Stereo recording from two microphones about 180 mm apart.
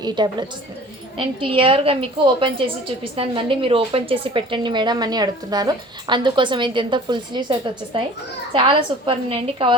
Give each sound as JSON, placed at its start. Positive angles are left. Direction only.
{"t": 0.0, "sound": "a woman's voice", "side_deg": -25}